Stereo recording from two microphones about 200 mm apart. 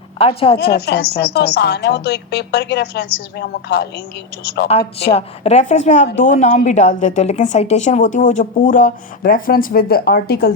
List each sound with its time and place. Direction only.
0.2 s a woman's voice: 30° left (ahead or behind)
0.6 s a woman's voice: 55° left (ahead or behind)
5.0 s a woman's voice: 30° left (ahead or behind); by 10.5 s 50° left (ahead or behind)